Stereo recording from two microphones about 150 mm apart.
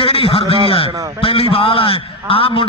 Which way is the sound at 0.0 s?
35° left (ahead or behind).